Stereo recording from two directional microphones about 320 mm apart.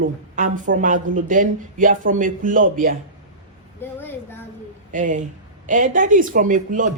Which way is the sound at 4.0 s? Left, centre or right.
Centre.